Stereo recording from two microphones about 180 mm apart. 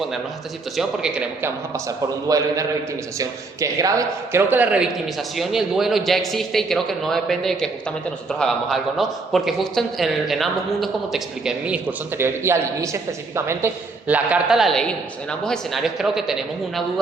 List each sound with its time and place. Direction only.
0.8 s a man's voice: 5° right (ahead or behind)
2.2 s a man's voice: 20° right (ahead or behind); by 16.8 s centre (ahead or behind)